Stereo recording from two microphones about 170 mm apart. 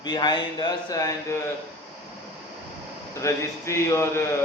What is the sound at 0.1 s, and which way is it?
Speech, 25° left (ahead or behind).